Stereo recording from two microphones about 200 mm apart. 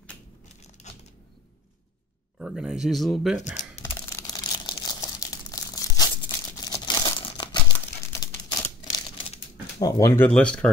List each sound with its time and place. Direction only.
0.8 s a sound: 35° left (ahead or behind)
2.3 s speech: 5° right (ahead or behind)
3.9 s crumpling: 15° left (ahead or behind)